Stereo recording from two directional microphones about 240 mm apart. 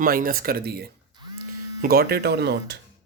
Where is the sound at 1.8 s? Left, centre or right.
Right.